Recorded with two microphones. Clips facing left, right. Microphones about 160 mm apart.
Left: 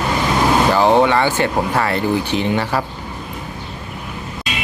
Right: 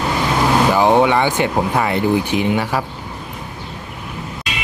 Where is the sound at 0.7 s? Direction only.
15° right (ahead or behind).